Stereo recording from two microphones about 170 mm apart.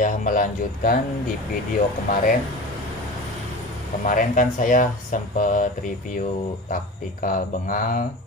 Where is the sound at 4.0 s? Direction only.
50° left (ahead or behind).